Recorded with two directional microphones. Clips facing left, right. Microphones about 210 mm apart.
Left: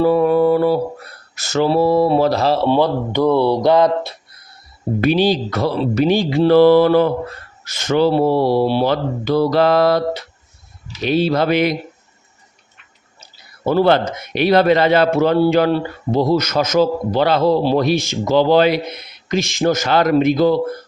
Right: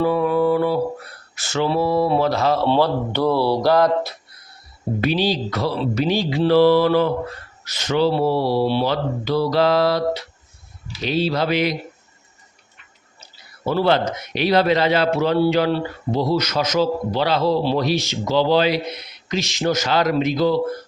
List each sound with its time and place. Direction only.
0.0 s music: 40° left (ahead or behind)
1.4 s speech: 40° left (ahead or behind)
2.6 s speech: 15° left (ahead or behind)
4.9 s a man's voice: 50° left (ahead or behind)
13.7 s a man's voice: 50° left (ahead or behind)